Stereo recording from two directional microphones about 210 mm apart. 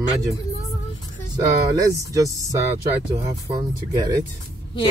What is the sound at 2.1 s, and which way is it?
Speech, 15° right (ahead or behind).